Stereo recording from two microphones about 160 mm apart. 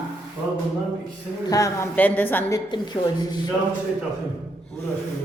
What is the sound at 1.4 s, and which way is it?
A woman's voice, 20° left (ahead or behind).